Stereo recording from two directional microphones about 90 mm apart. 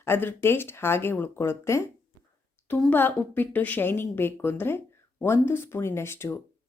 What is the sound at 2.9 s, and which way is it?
Speech, 20° left (ahead or behind).